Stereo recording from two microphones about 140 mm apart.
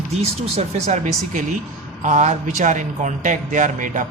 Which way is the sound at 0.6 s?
55° right (ahead or behind).